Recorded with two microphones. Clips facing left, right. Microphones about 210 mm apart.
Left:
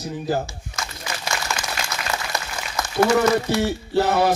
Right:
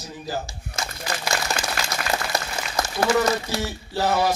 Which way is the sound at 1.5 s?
35° right (ahead or behind).